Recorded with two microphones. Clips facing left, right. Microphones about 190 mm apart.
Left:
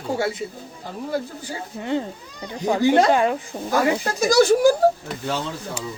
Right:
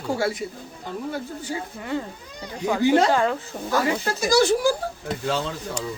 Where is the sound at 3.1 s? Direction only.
15° left (ahead or behind).